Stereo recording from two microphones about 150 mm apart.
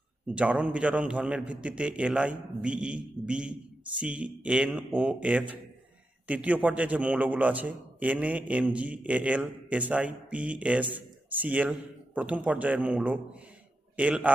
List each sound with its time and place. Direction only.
0.3 s a man's voice: 10° right (ahead or behind)